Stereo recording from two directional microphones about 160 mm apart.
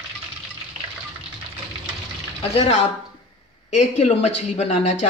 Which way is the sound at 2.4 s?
40° left (ahead or behind).